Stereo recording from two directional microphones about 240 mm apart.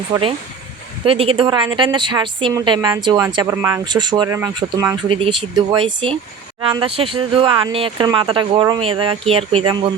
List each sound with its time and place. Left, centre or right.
0.1 s a woman's voice: right